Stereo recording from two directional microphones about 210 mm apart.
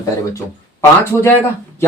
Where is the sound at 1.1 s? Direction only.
10° left (ahead or behind).